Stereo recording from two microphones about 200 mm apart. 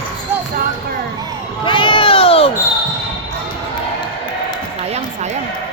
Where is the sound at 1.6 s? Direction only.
25° left (ahead or behind).